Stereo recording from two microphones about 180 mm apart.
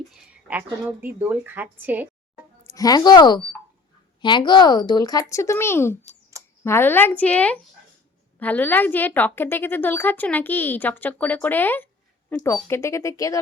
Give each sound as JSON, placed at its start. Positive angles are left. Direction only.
{"t": 0.4, "sound": "speech", "side_deg": -10}
{"t": 2.7, "sound": "speech", "side_deg": 20}
{"t": 6.3, "sound": "a sound", "side_deg": -15}
{"t": 6.7, "sound": "a woman's voice", "side_deg": 10}